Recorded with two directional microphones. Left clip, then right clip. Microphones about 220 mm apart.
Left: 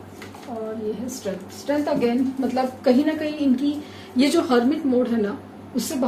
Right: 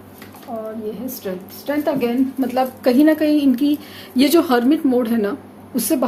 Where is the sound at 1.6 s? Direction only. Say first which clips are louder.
Right 2 dB; 50° right (ahead or behind).